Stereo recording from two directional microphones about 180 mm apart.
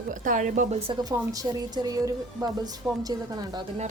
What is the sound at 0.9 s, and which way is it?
A woman's voice, 20° right (ahead or behind).